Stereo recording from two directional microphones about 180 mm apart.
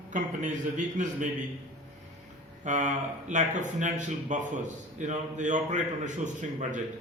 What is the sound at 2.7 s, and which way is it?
Speech, 40° right (ahead or behind).